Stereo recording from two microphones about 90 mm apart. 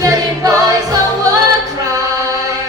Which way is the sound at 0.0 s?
40° right (ahead or behind).